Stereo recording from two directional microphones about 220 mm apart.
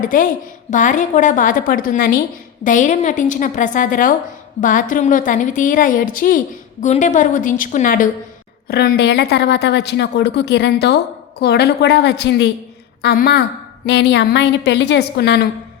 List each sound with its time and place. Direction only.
0.0 s a woman's voice: 35° left (ahead or behind)